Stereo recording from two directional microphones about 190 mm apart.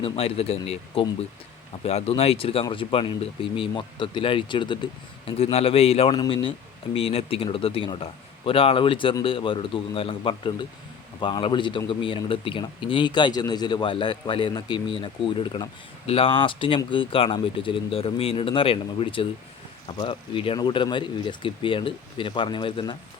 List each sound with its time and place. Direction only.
0.0 s a man's voice: 30° left (ahead or behind)